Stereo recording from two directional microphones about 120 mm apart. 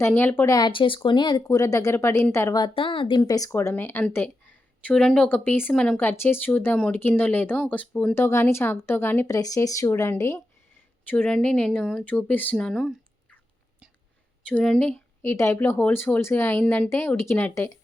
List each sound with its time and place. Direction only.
0.0 s speech: 15° left (ahead or behind)
0.4 s speech: 30° left (ahead or behind)
0.7 s speech: 45° left (ahead or behind); by 2.6 s 25° left (ahead or behind)
2.6 s speech: 45° left (ahead or behind)
3.2 s speech: 30° left (ahead or behind); by 6.0 s 5° left (ahead or behind)
6.0 s speech: 20° left (ahead or behind)
8.1 s speech: 20° left (ahead or behind)
9.3 s speech: 30° left (ahead or behind); by 12.9 s 5° left (ahead or behind)
14.4 s speech: 5° left (ahead or behind)